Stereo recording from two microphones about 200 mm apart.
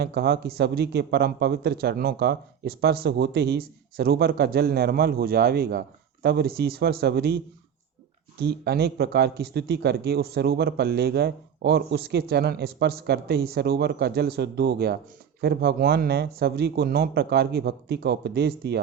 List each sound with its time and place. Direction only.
0.0 s speech: 55° right (ahead or behind)
8.4 s speech: 55° right (ahead or behind)